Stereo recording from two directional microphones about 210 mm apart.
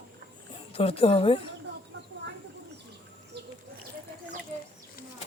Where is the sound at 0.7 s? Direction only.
30° left (ahead or behind).